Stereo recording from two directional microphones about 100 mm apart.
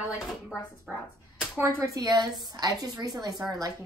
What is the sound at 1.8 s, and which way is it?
A woman's voice, 40° right (ahead or behind).